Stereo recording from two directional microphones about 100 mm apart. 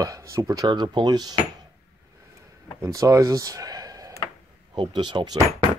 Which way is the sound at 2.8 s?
35° right (ahead or behind).